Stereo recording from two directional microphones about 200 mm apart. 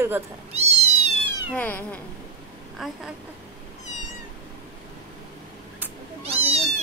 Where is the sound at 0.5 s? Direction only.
30° right (ahead or behind).